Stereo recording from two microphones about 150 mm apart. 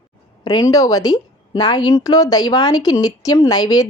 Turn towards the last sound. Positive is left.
turn(degrees=25)  # may be behind; listen again after turning